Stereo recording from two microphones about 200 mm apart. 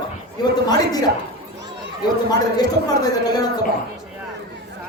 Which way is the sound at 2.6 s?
20° left (ahead or behind).